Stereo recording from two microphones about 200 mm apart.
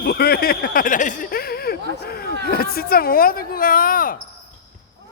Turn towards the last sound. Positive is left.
turn(degrees=45)  # may be behind; listen again after turning